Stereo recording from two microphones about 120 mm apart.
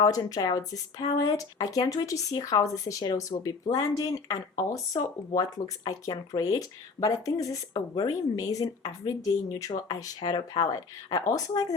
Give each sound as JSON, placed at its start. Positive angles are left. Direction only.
{"t": 0.0, "sound": "speech", "side_deg": 30}